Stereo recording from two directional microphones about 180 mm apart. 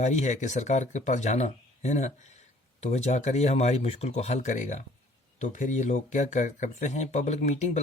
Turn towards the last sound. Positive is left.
turn(degrees=40)  # may be behind; listen again after turning